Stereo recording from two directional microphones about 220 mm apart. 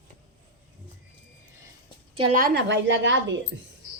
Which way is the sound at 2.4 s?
45° right (ahead or behind).